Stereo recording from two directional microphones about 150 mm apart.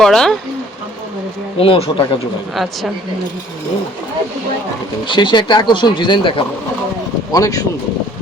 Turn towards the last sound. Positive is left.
turn(degrees=25)  # may be behind; listen again after turning